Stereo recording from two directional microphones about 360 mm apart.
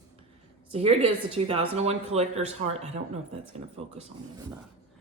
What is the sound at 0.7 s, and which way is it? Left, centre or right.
A woman's voice, centre.